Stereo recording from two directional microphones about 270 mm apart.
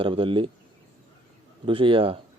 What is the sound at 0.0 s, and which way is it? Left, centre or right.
Speech, centre.